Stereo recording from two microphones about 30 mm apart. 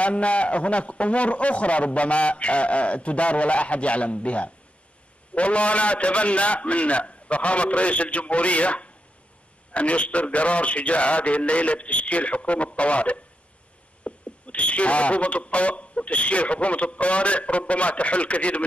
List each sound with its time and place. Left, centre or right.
0.0 s speech: left